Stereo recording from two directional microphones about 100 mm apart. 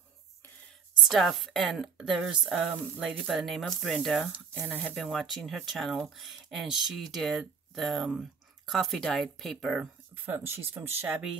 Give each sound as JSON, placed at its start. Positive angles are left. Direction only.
{"t": 1.0, "sound": "speech", "side_deg": 0}
{"t": 10.1, "sound": "speech", "side_deg": -20}
{"t": 11.1, "sound": "speech", "side_deg": -10}